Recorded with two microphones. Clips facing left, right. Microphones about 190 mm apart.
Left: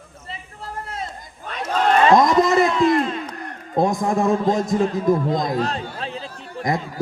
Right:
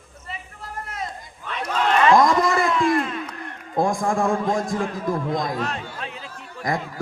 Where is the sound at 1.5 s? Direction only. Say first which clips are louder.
Left 3 dB; 40° left (ahead or behind).